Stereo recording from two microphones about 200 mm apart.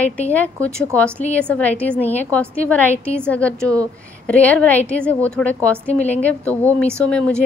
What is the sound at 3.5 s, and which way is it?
Speech, 15° right (ahead or behind).